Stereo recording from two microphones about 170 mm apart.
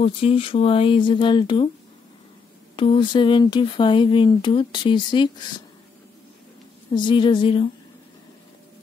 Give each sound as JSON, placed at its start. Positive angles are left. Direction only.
{"t": 0.0, "sound": "speech", "side_deg": 35}
{"t": 2.7, "sound": "speech", "side_deg": 30}
{"t": 6.9, "sound": "speech", "side_deg": 25}